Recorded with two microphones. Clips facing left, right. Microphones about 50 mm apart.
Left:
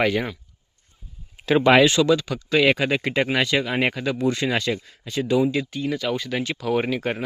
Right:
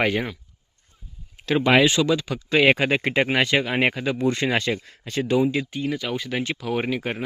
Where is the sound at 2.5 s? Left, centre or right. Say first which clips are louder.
Right 1 dB; right.